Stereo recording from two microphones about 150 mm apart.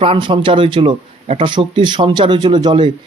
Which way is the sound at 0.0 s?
35° right (ahead or behind).